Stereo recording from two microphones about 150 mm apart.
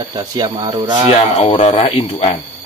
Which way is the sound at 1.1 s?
45° left (ahead or behind).